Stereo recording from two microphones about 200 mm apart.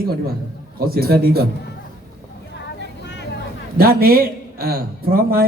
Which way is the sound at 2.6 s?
60° left (ahead or behind).